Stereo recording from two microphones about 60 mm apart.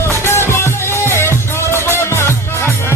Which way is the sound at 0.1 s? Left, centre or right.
Left.